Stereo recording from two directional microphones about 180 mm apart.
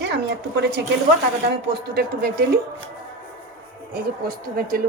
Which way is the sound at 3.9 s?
55° right (ahead or behind).